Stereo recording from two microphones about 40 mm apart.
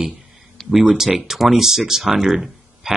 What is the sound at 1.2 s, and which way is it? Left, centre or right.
Speech, centre.